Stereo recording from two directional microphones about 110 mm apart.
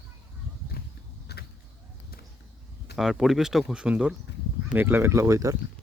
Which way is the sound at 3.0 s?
5° right (ahead or behind).